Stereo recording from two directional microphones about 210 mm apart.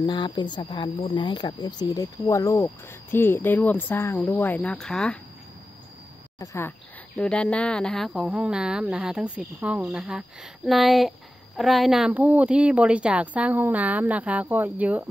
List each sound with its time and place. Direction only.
0.0 s speech: 20° left (ahead or behind); by 5.2 s 5° left (ahead or behind)
6.4 s speech: 15° left (ahead or behind); by 15.0 s 5° right (ahead or behind)